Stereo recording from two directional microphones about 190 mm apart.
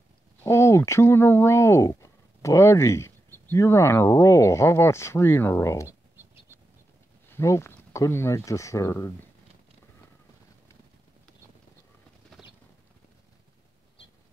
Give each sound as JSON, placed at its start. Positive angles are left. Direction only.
{"t": 0.4, "sound": "speech", "side_deg": 15}
{"t": 7.2, "sound": "speech", "side_deg": 15}
{"t": 12.3, "sound": "a sound", "side_deg": 5}